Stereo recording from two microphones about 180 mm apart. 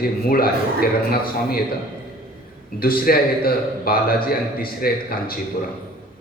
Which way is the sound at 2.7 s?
55° left (ahead or behind).